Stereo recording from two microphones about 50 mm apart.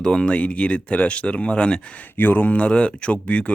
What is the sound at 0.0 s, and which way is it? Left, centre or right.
Speech, centre.